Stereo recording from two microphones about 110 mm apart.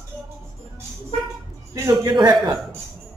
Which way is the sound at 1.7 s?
40° right (ahead or behind).